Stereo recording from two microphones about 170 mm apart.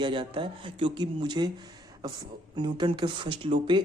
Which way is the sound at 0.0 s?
30° right (ahead or behind).